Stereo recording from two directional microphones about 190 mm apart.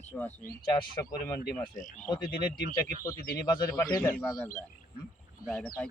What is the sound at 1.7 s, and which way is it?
Speech, 45° left (ahead or behind).